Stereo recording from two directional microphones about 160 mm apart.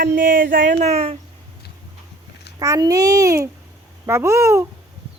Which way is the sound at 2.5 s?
20° right (ahead or behind).